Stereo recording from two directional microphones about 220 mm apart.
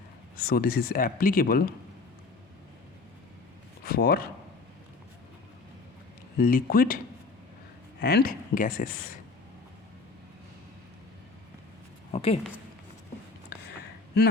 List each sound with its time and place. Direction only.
0.3 s speech: 45° left (ahead or behind)
3.8 s speech: 45° left (ahead or behind)
6.4 s speech: 40° left (ahead or behind)
8.0 s speech: 45° left (ahead or behind)
12.1 s speech: 25° left (ahead or behind)